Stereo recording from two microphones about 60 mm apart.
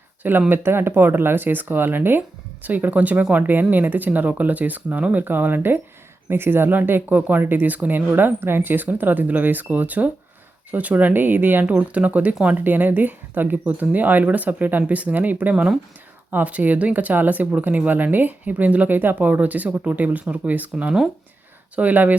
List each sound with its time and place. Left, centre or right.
0.2 s speech: right
12.6 s speech: right